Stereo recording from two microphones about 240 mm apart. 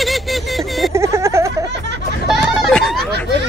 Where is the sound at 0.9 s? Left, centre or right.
Centre.